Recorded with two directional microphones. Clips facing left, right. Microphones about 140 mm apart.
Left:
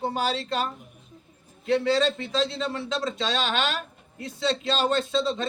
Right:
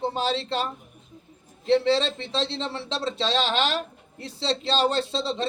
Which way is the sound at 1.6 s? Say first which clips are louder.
Right 1 dB; 30° right (ahead or behind).